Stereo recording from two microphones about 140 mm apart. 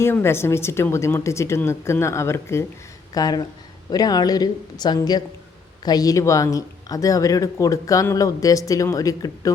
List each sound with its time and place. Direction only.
0.0 s speech: 15° left (ahead or behind)